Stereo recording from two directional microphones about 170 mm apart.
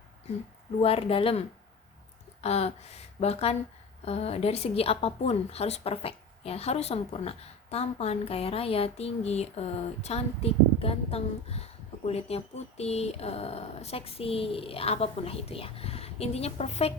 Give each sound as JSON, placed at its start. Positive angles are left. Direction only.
{"t": 0.8, "sound": "a woman's voice", "side_deg": 35}